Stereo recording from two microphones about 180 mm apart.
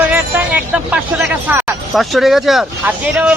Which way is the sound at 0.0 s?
10° right (ahead or behind).